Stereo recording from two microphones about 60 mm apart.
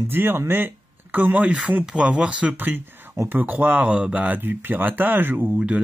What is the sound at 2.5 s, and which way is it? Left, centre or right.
Speech, right.